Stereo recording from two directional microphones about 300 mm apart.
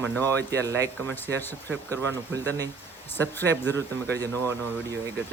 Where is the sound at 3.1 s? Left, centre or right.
Centre.